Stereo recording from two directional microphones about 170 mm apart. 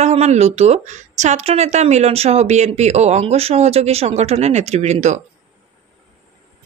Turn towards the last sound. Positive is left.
turn(degrees=-45)  # may be behind; listen again after turning